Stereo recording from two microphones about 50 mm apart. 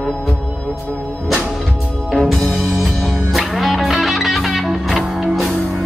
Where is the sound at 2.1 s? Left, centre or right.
Centre.